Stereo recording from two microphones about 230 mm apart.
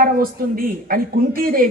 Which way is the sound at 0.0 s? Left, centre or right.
Right.